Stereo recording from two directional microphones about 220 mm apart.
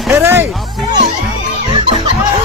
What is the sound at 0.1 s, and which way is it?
Speech, 10° right (ahead or behind).